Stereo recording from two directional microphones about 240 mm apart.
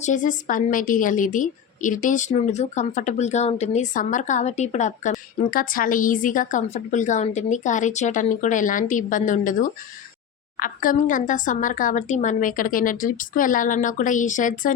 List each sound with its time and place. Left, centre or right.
0.0 s a woman's voice: left